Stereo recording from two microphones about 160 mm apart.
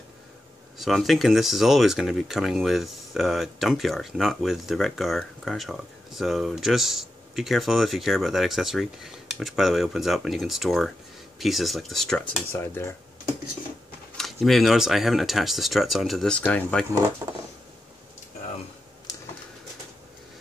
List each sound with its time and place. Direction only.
0.7 s speech: centre (ahead or behind)
12.5 s speech: 15° left (ahead or behind)
14.1 s speech: centre (ahead or behind)
17.2 s a sound: 20° right (ahead or behind)